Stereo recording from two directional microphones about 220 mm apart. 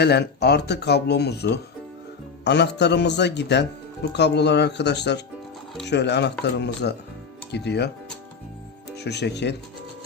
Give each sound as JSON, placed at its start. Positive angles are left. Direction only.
{"t": 0.0, "sound": "speech", "side_deg": 50}
{"t": 9.0, "sound": "speech", "side_deg": 50}